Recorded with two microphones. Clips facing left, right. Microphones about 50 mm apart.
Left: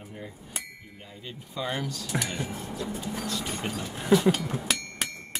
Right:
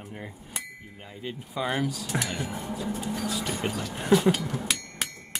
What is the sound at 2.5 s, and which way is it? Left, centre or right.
Speech, centre.